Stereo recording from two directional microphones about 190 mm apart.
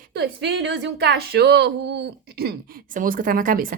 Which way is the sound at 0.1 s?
65° right (ahead or behind).